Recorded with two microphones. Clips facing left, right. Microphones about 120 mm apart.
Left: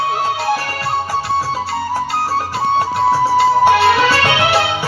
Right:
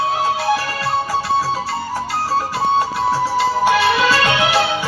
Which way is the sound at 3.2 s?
25° left (ahead or behind).